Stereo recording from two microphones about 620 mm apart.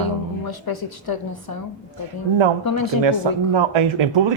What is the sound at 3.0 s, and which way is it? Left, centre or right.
Speech, right.